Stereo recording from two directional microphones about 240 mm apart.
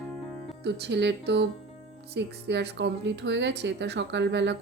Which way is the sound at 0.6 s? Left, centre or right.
Right.